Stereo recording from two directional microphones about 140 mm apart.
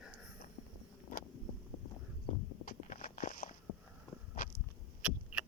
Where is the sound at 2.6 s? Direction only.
70° left (ahead or behind).